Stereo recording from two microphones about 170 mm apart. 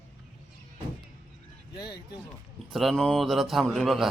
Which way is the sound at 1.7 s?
25° left (ahead or behind).